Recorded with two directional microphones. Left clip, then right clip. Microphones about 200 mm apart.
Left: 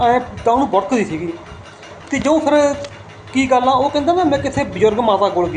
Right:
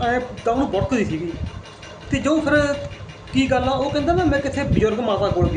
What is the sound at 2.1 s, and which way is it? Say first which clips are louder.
A man's voice: left 4 dB; 10° right (ahead or behind).